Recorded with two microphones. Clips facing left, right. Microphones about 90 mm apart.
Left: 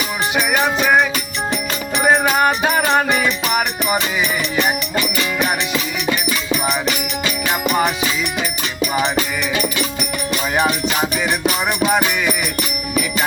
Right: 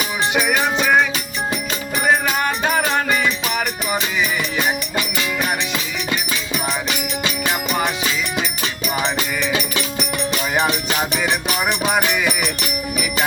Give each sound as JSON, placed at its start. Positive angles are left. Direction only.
{"t": 0.3, "sound": "music", "side_deg": 10}
{"t": 2.2, "sound": "music", "side_deg": 20}